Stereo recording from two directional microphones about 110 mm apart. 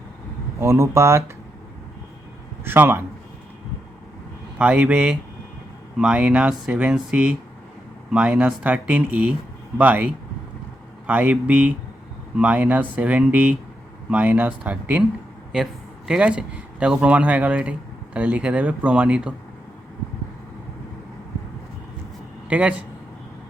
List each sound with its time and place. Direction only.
0.6 s speech: 25° right (ahead or behind)
2.6 s speech: 20° right (ahead or behind)
4.5 s speech: 10° right (ahead or behind)
16.0 s speech: 10° right (ahead or behind)
22.4 s speech: 10° right (ahead or behind)